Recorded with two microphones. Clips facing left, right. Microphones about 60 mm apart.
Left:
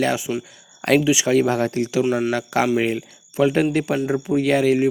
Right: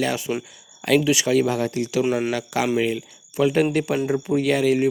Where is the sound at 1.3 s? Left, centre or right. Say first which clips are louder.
Left 2 dB; left.